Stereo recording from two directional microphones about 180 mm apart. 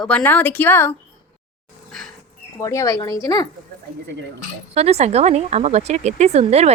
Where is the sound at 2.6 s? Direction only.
20° left (ahead or behind).